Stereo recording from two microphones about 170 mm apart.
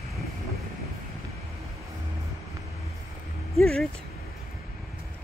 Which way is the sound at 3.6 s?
5° left (ahead or behind).